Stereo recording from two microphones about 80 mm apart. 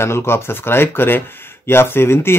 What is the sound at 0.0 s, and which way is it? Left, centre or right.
Speech, left.